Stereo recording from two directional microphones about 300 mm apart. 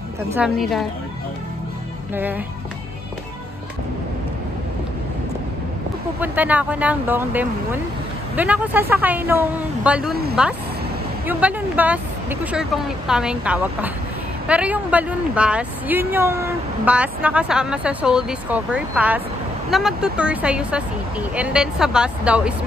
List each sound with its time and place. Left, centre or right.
0.4 s a woman's voice: centre
2.1 s a woman's voice: centre
6.1 s a woman's voice: centre